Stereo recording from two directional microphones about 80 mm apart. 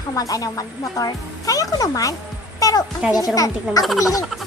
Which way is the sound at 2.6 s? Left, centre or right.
Left.